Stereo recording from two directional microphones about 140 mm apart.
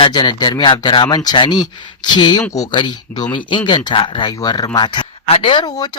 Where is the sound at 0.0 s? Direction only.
30° left (ahead or behind).